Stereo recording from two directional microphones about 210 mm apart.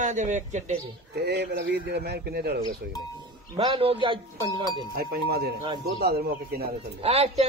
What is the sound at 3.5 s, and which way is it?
Speech, 25° right (ahead or behind).